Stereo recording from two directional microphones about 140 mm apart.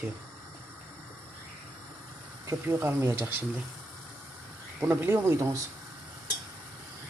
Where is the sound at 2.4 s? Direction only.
15° right (ahead or behind).